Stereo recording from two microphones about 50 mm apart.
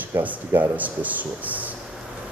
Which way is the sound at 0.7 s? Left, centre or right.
Right.